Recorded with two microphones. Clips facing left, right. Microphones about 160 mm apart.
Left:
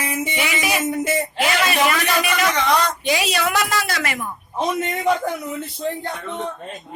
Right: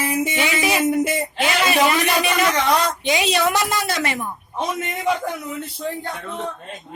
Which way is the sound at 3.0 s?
20° right (ahead or behind).